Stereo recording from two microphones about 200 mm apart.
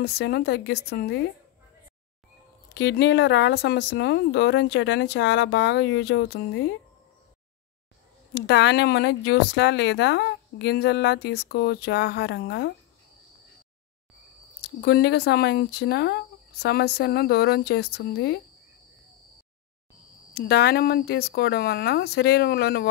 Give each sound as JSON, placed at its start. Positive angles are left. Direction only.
{"t": 0.0, "sound": "speech", "side_deg": 55}
{"t": 2.7, "sound": "speech", "side_deg": 60}
{"t": 8.4, "sound": "speech", "side_deg": 60}
{"t": 14.6, "sound": "speech", "side_deg": 55}
{"t": 20.3, "sound": "speech", "side_deg": 50}